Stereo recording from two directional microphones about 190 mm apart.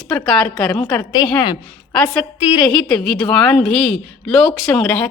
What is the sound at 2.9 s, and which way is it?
A woman's voice, 5° left (ahead or behind).